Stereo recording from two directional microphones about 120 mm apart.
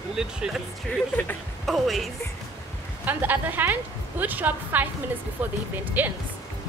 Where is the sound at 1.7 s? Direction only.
Centre (ahead or behind).